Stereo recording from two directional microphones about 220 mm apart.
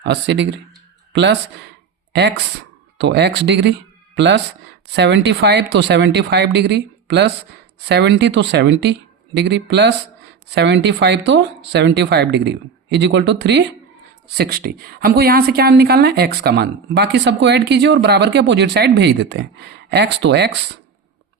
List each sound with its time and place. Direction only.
0.0 s a woman's voice: 50° right (ahead or behind)
3.0 s a woman's voice: 50° right (ahead or behind)